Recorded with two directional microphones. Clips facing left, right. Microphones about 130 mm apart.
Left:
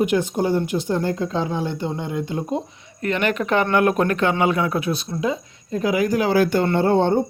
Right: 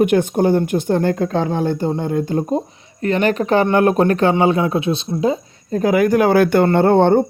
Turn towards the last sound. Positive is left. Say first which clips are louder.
# right 5 dB
turn(degrees=-60)  # may be behind; listen again after turning